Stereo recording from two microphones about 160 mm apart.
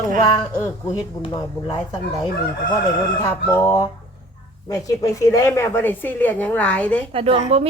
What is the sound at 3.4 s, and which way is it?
A woman's voice, 20° left (ahead or behind).